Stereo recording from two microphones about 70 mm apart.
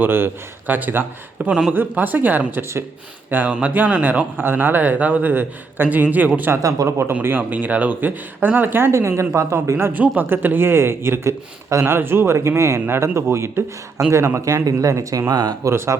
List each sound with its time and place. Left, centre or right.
0.0 s a man's voice: right
1.5 s a man's voice: centre
1.7 s a man's voice: right
4.4 s a man's voice: right
6.6 s speech: right
6.8 s speech: right
9.9 s speech: right
15.3 s speech: right
15.6 s speech: right